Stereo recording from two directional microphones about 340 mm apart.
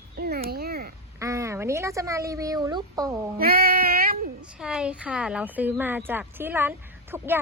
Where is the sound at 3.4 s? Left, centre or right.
Right.